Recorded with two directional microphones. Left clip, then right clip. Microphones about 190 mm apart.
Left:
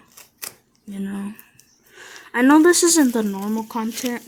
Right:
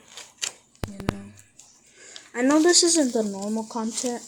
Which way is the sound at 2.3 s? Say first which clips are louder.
Left 6 dB; 35° left (ahead or behind).